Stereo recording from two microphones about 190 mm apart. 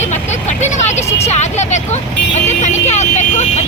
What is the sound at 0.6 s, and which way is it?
Speech, 35° left (ahead or behind).